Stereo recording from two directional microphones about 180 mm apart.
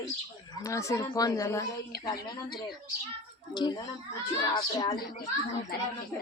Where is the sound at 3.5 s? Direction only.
25° left (ahead or behind).